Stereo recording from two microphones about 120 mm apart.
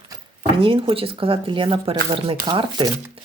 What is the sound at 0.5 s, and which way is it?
Speech, 45° right (ahead or behind).